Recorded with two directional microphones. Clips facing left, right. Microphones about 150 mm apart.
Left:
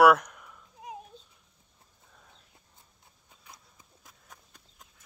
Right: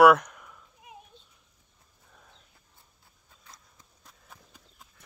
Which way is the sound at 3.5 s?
15° left (ahead or behind).